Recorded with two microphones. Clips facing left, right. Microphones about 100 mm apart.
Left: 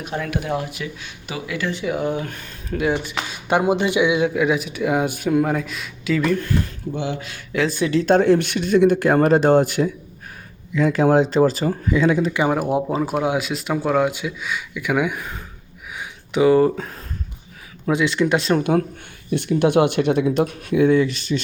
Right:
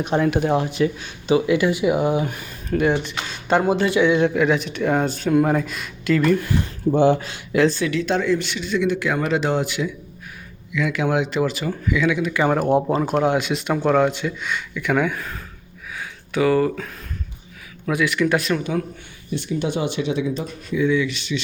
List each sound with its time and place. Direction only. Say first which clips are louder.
0.0 s speech: right 7 dB; 30° right (ahead or behind)
1.5 s speech: right 6 dB; 15° right (ahead or behind); by 5.4 s 10° left (ahead or behind)
5.4 s speech: right 2 dB; centre (ahead or behind)
6.9 s speech: right 10 dB; 45° right (ahead or behind)
7.5 s speech: right 4 dB; 5° right (ahead or behind)
7.9 s speech: left 5 dB; 40° left (ahead or behind)
12.5 s speech: right 2 dB; 5° left (ahead or behind)
16.0 s a sound: left 3 dB; 20° left (ahead or behind)
17.8 s speech: left 1 dB; 25° left (ahead or behind)
18.6 s speech: left 5 dB; 50° left (ahead or behind)